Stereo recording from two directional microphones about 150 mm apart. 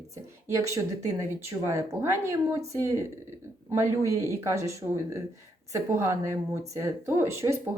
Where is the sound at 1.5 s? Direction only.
15° right (ahead or behind).